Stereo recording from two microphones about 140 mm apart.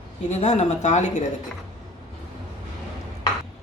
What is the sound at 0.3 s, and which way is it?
A woman's voice, 50° left (ahead or behind).